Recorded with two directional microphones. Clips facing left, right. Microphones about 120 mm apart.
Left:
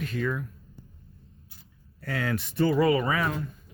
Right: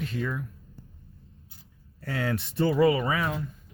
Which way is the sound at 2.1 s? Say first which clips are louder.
Left 1 dB; 25° right (ahead or behind).